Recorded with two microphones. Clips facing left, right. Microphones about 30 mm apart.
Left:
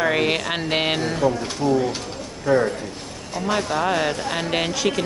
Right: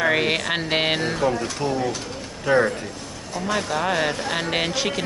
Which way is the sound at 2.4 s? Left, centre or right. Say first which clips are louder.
Even; right.